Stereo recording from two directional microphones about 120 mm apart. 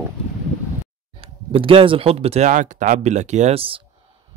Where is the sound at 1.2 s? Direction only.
50° right (ahead or behind); by 3.6 s 75° right (ahead or behind).